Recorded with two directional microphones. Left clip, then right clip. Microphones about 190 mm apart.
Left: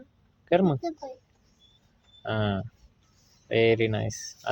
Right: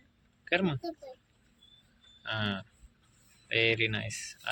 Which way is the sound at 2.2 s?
25° left (ahead or behind).